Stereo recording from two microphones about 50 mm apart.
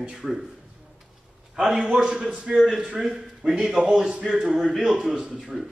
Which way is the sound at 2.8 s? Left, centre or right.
Centre.